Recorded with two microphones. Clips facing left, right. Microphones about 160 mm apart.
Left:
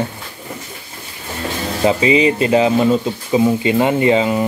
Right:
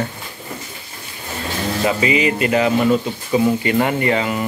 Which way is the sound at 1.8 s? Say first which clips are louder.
Left 5 dB; 30° left (ahead or behind).